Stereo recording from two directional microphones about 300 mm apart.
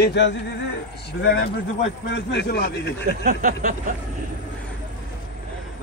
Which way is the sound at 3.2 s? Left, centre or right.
Right.